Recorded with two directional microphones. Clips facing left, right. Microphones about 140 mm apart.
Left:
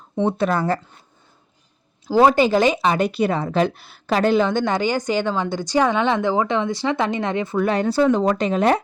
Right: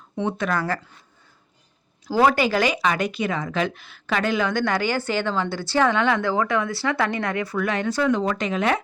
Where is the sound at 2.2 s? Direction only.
20° left (ahead or behind).